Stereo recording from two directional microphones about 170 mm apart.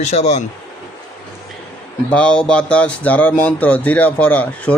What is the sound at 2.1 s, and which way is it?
Speech, 5° left (ahead or behind).